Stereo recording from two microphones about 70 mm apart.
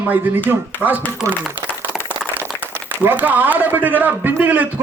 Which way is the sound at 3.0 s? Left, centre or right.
Right.